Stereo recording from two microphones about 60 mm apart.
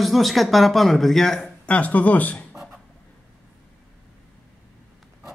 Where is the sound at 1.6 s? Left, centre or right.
Left.